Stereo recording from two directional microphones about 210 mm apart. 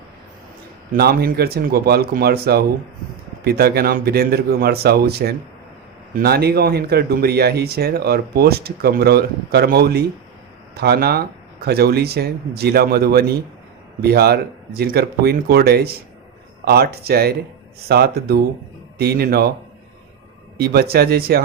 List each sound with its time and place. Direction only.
0.9 s speech: 45° right (ahead or behind)
20.6 s speech: 45° right (ahead or behind)